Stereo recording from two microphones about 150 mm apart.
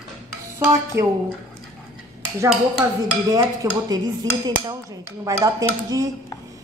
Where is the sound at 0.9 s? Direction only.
15° right (ahead or behind).